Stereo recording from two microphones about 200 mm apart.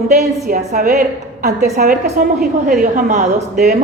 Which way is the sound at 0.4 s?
50° right (ahead or behind).